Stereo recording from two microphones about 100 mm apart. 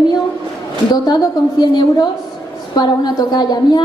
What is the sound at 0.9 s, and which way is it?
A woman's voice, 45° left (ahead or behind).